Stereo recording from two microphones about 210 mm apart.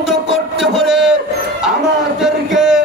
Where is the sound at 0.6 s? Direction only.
Centre (ahead or behind).